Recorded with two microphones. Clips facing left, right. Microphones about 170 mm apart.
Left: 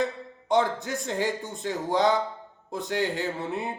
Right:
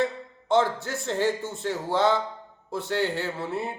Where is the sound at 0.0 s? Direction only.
15° left (ahead or behind).